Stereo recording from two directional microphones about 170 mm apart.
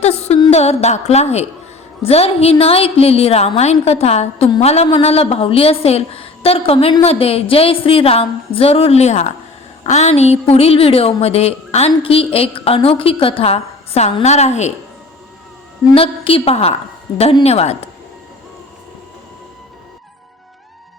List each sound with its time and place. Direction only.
0.0 s music: 40° left (ahead or behind)
0.5 s a woman's voice: 40° left (ahead or behind)
16.0 s a woman's voice: 35° left (ahead or behind)